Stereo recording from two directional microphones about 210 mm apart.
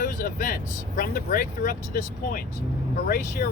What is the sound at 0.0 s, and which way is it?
Vehicle, 40° left (ahead or behind).